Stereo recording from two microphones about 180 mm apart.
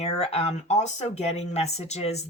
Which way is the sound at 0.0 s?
35° left (ahead or behind).